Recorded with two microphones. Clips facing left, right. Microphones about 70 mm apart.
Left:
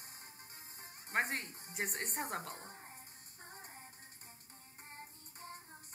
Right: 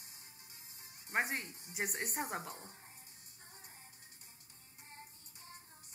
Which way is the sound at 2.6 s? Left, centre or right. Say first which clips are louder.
Left 4 dB; left.